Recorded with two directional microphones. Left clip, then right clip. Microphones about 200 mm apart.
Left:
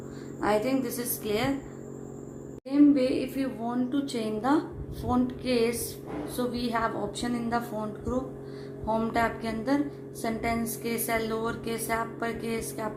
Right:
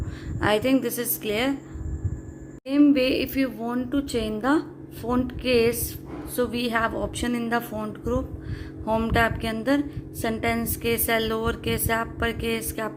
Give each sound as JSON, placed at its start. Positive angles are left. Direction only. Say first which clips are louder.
{"t": 0.3, "sound": "a woman's voice", "louder": "right 4 dB", "side_deg": -45}
{"t": 2.6, "sound": "a woman's voice", "louder": "right 3 dB", "side_deg": -50}